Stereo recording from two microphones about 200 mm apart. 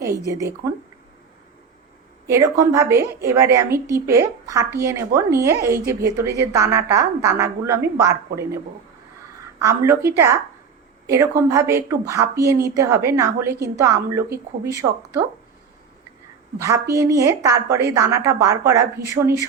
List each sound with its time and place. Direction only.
2.2 s a woman's voice: 15° right (ahead or behind)
9.6 s a woman's voice: 15° right (ahead or behind)
16.6 s a woman's voice: 15° right (ahead or behind)